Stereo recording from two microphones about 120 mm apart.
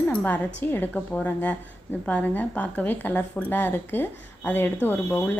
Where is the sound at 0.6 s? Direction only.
15° left (ahead or behind).